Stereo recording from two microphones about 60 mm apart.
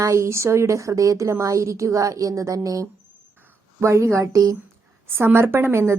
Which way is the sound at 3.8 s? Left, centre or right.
Right.